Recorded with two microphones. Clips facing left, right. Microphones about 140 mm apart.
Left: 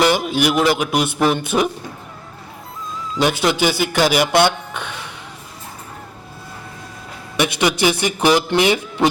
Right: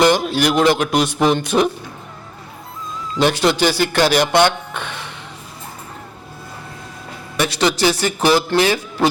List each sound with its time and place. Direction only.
0.0 s speech: 10° left (ahead or behind)
3.2 s speech: 10° left (ahead or behind)
7.3 s speech: 15° left (ahead or behind)